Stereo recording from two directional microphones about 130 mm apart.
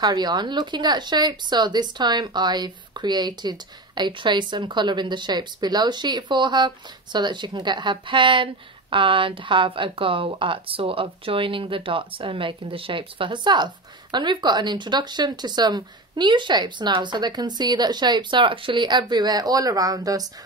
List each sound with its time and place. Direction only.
0.0 s speech: 30° right (ahead or behind)